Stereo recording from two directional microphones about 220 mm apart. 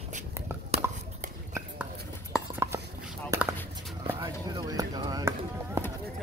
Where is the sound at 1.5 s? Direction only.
10° right (ahead or behind).